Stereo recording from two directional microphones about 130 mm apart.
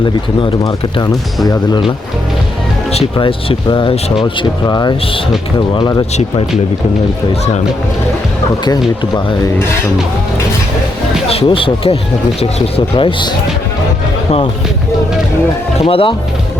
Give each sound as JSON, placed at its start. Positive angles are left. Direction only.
{"t": 0.0, "sound": "speech", "side_deg": 35}
{"t": 2.9, "sound": "speech", "side_deg": 45}
{"t": 11.3, "sound": "speech", "side_deg": 45}
{"t": 15.8, "sound": "speech", "side_deg": 45}